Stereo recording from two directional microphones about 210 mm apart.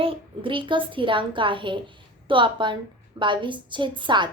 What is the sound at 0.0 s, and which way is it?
Speech, 25° right (ahead or behind).